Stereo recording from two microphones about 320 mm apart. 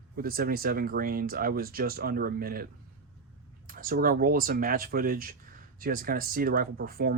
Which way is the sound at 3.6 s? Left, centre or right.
Right.